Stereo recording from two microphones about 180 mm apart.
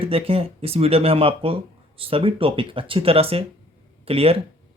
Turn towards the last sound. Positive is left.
turn(degrees=-30)  # may be behind; listen again after turning